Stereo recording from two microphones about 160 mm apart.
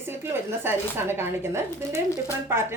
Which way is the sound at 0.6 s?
15° right (ahead or behind).